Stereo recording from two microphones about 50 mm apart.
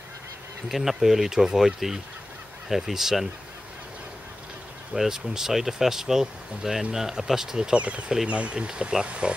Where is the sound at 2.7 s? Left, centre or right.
Centre.